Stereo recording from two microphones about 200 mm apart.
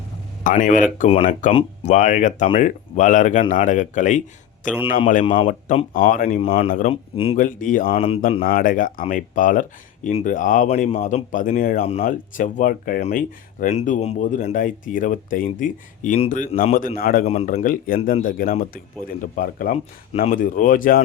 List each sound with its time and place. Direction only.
0.4 s speech: 40° left (ahead or behind)
5.2 s speech: 25° left (ahead or behind)
5.5 s speech: 40° left (ahead or behind)
6.4 s speech: 30° left (ahead or behind)
7.3 s speech: 40° left (ahead or behind)
7.9 s speech: 30° left (ahead or behind)
8.4 s speech: 45° left (ahead or behind)
11.9 s speech: 35° left (ahead or behind)
17.2 s speech: 35° left (ahead or behind)
17.5 s speech: 45° left (ahead or behind)